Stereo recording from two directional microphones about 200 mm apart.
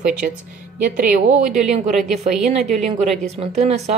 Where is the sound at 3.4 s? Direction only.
30° right (ahead or behind).